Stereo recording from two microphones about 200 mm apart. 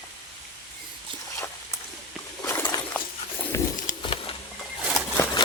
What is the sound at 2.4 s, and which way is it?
Patter, 15° left (ahead or behind).